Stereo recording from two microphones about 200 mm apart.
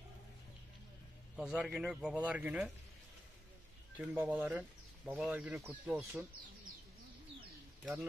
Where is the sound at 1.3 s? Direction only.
5° right (ahead or behind).